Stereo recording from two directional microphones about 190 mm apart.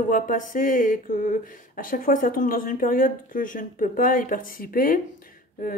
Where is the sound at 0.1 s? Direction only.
45° left (ahead or behind).